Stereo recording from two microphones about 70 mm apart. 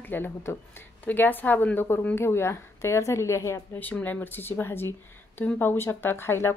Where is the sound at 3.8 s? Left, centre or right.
Left.